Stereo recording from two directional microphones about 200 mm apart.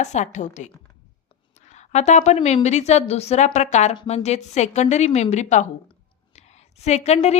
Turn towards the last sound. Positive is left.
turn(degrees=35)  # may be behind; listen again after turning